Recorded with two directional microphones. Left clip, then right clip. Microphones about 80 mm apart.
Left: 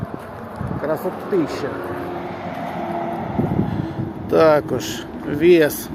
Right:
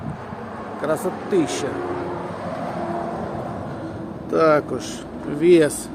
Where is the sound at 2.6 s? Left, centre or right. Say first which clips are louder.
Left 2 dB; right.